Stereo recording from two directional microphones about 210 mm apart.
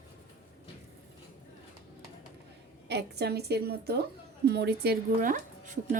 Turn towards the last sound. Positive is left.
turn(degrees=-40)  # may be behind; listen again after turning